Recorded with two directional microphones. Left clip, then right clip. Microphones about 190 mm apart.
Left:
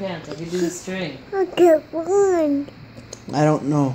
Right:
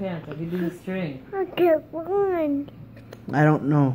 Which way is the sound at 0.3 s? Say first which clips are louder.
Left 5 dB; 30° left (ahead or behind).